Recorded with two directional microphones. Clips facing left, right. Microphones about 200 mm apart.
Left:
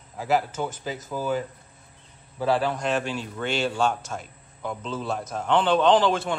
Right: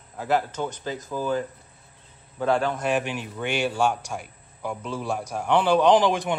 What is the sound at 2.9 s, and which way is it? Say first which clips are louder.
A man's voice: right 1 dB; 15° right (ahead or behind).